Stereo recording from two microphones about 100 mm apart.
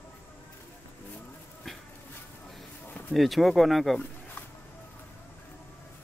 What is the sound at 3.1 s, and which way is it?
Speech, centre (ahead or behind).